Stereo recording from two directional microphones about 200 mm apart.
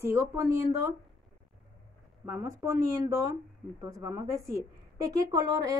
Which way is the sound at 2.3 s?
15° right (ahead or behind).